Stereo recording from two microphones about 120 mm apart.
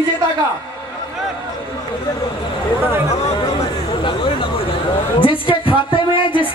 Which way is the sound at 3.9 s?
45° left (ahead or behind).